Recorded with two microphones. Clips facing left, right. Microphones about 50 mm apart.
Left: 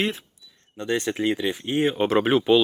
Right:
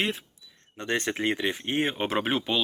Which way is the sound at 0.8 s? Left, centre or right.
Right.